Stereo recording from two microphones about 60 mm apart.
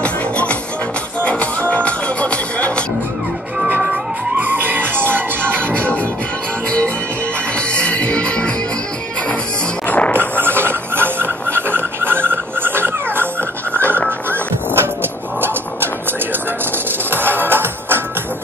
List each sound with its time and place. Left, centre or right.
0.0 s music: left
3.9 s music: right
7.5 s music: centre
9.8 s music: left
10.1 s a sound: right
14.3 s music: right
16.7 s music: right